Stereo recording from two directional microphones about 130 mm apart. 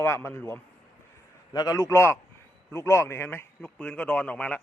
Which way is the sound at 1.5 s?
25° left (ahead or behind).